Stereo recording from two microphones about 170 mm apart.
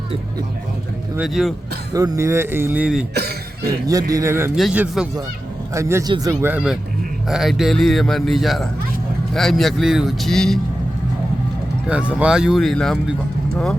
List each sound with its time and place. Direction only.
1.1 s a man's voice: 5° right (ahead or behind)
1.9 s speech: 20° right (ahead or behind); by 3.1 s 5° right (ahead or behind)
3.2 s speech: 70° right (ahead or behind)
4.1 s speech: 15° right (ahead or behind)
4.5 s a man's voice: 5° right (ahead or behind)
5.7 s speech: 15° right (ahead or behind)
6.5 s a man's voice: 5° right (ahead or behind)
11.9 s a man's voice: 5° right (ahead or behind)